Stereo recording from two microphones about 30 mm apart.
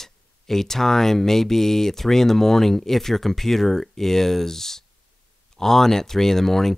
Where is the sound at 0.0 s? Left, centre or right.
Centre.